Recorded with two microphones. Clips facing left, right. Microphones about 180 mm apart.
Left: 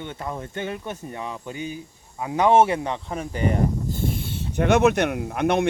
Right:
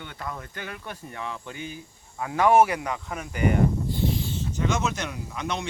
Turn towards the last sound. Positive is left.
turn(degrees=60)  # may be behind; listen again after turning